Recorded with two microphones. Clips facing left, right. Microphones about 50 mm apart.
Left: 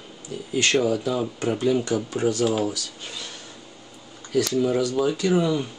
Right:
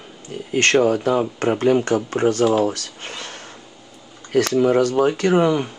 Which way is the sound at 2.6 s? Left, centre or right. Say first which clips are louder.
Right 5 dB; right.